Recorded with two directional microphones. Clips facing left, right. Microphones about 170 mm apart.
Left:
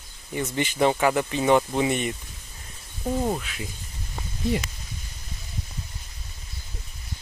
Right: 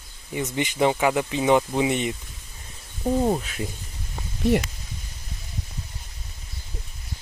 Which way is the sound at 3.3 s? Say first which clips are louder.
Right 4 dB; 40° right (ahead or behind).